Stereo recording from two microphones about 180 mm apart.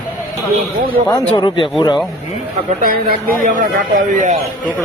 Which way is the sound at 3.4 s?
50° right (ahead or behind).